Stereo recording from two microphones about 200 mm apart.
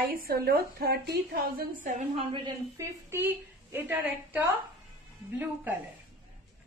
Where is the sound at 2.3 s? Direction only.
20° right (ahead or behind).